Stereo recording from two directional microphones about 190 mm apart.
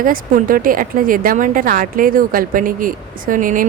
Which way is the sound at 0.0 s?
45° right (ahead or behind).